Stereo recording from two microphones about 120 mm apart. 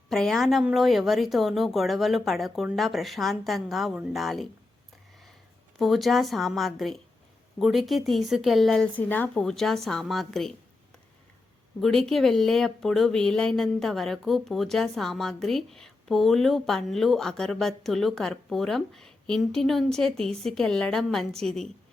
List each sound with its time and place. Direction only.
0.1 s speech: 5° left (ahead or behind)
5.8 s speech: centre (ahead or behind)
9.0 s speech: 15° left (ahead or behind)
9.4 s speech: 5° left (ahead or behind)
11.8 s speech: 5° left (ahead or behind)